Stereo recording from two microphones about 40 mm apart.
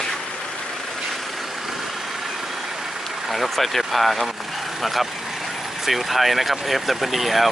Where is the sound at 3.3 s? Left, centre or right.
Centre.